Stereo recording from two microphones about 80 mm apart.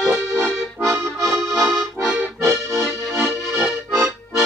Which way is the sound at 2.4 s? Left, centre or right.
Right.